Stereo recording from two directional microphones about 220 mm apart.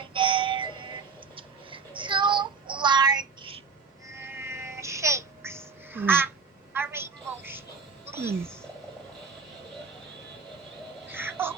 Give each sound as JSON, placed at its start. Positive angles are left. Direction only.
{"t": 0.0, "sound": "synthetic singing", "side_deg": -20}
{"t": 1.4, "sound": "child singing", "side_deg": -25}
{"t": 4.1, "sound": "babbling", "side_deg": -10}
{"t": 6.7, "sound": "a sound", "side_deg": -10}
{"t": 8.1, "sound": "speech", "side_deg": -10}
{"t": 11.1, "sound": "a sound", "side_deg": -10}